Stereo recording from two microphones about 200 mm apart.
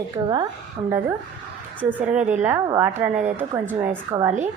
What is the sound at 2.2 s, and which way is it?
Speech, 35° right (ahead or behind).